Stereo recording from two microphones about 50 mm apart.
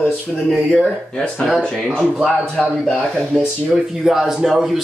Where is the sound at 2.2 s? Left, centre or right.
Centre.